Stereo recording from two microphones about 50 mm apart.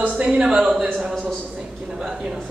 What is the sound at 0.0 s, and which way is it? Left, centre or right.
Speech, right.